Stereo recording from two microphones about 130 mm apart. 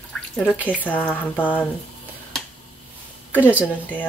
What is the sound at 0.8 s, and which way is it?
Speech, 10° left (ahead or behind).